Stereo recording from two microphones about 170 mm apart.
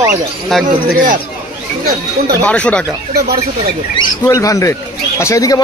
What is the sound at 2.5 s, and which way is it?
Speech, 5° left (ahead or behind).